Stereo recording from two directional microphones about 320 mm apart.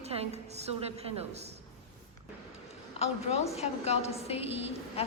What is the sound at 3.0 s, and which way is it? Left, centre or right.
A woman's voice, centre.